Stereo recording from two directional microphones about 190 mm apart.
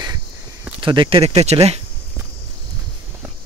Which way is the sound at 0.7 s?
25° right (ahead or behind).